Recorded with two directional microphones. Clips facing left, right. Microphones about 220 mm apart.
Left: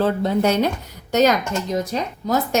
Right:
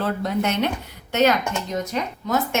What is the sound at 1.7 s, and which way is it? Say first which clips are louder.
Speech: left 3 dB; 35° left (ahead or behind).